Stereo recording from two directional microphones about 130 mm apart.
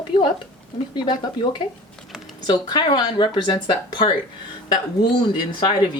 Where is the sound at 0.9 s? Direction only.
35° left (ahead or behind).